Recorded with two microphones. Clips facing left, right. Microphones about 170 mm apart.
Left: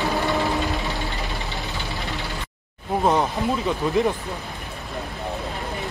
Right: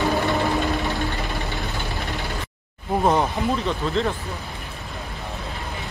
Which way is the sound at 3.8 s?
15° left (ahead or behind).